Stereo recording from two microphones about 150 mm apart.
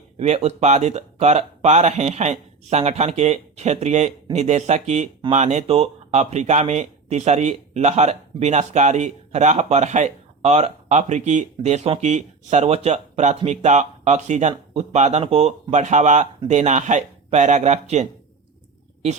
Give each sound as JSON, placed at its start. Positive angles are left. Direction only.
{"t": 0.2, "sound": "speech", "side_deg": -45}